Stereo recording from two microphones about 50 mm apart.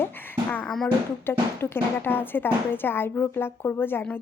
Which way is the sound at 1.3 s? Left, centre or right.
Left.